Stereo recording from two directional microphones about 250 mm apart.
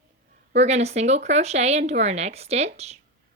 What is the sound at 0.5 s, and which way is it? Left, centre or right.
Speech, right.